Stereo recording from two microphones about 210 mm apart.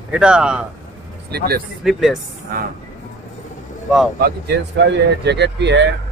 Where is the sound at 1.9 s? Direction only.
Centre (ahead or behind).